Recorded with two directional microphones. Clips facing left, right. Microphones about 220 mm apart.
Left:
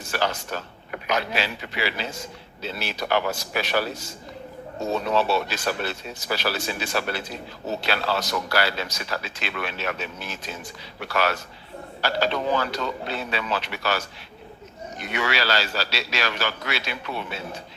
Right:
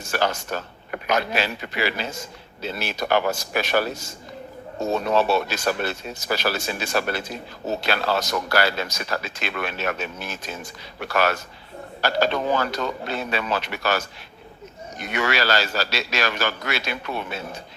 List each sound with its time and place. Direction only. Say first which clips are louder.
0.1 s speech: right 2 dB; 50° right (ahead or behind)
5.1 s speech: right 3 dB; 45° right (ahead or behind)